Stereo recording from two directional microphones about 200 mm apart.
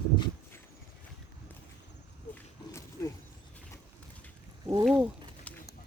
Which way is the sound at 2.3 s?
15° left (ahead or behind).